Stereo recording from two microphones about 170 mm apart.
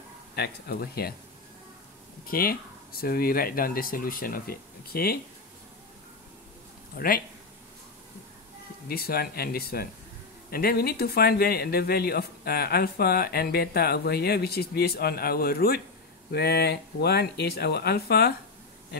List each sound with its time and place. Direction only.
0.4 s speech: 65° left (ahead or behind)
2.2 s speech: 60° left (ahead or behind)
7.0 s speech: 60° left (ahead or behind)
8.8 s speech: 65° left (ahead or behind)